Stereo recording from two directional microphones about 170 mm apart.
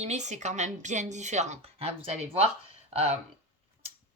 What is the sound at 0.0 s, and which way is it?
Speech, 40° right (ahead or behind).